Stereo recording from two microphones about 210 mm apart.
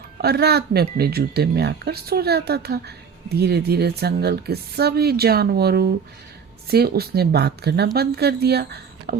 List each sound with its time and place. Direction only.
0.2 s speech: 50° right (ahead or behind)